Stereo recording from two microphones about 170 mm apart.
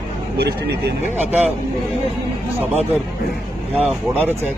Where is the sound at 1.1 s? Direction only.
10° right (ahead or behind).